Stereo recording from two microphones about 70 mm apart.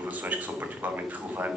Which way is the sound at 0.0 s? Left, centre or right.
Right.